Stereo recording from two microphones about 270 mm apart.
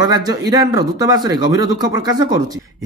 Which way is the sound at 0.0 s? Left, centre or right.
Centre.